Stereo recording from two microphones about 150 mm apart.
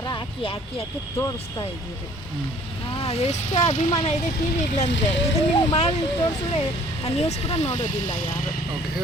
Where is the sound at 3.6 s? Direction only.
30° left (ahead or behind).